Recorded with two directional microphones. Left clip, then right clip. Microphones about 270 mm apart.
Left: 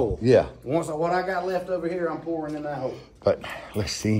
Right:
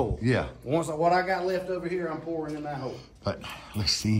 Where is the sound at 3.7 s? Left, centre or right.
Left.